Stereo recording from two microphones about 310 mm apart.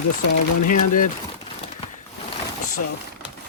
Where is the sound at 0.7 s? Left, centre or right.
Left.